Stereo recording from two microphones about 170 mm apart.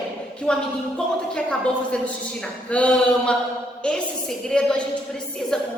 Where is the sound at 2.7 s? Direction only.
5° left (ahead or behind).